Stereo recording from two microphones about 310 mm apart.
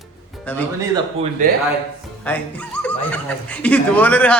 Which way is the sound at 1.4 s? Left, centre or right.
Right.